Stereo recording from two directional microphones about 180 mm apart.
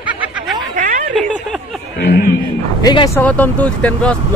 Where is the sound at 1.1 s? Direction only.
Centre (ahead or behind).